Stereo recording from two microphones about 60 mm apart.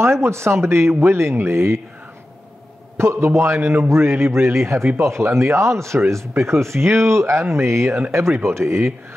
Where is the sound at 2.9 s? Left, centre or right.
Right.